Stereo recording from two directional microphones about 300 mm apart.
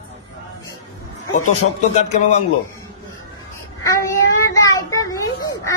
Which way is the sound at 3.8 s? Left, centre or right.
Centre.